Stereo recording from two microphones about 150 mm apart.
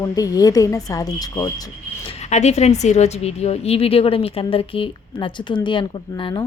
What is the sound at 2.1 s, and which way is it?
A woman's voice, 50° left (ahead or behind).